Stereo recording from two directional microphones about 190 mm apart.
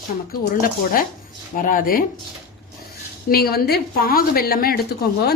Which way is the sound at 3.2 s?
55° left (ahead or behind).